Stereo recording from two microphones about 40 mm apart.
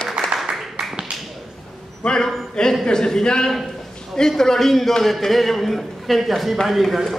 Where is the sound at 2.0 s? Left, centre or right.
Left.